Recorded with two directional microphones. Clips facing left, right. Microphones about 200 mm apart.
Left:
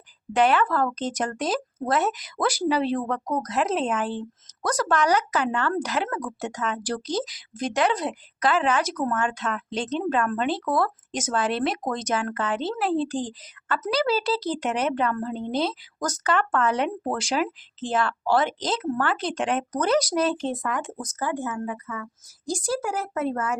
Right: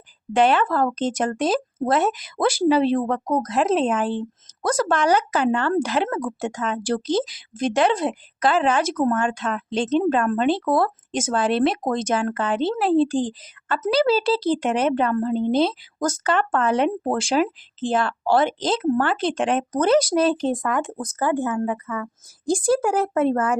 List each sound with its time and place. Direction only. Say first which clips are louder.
0.3 s speech: right 3 dB; 30° right (ahead or behind); by 23.6 s 50° right (ahead or behind)